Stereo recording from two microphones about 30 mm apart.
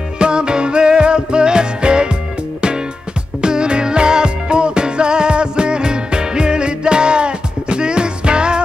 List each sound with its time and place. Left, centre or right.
0.2 s music: right
3.3 s music: right